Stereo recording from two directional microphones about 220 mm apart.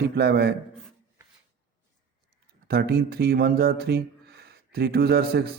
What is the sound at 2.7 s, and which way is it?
Speech, 45° right (ahead or behind).